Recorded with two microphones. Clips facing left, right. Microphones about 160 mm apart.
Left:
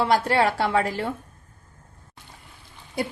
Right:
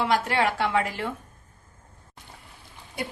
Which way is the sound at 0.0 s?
35° left (ahead or behind).